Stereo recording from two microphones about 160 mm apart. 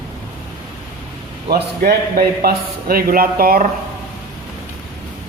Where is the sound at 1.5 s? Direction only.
70° right (ahead or behind).